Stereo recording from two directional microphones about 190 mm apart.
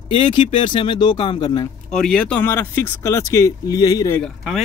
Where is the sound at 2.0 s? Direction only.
5° left (ahead or behind).